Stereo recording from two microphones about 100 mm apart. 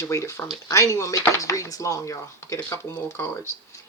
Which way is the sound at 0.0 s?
30° left (ahead or behind).